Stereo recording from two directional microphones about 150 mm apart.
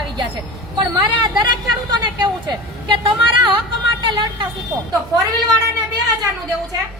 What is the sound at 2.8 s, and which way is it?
Speech, 30° right (ahead or behind).